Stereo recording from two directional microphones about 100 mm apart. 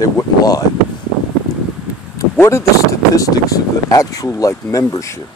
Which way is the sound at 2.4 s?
25° left (ahead or behind).